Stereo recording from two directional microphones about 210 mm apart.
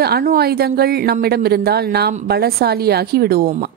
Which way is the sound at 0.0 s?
45° right (ahead or behind).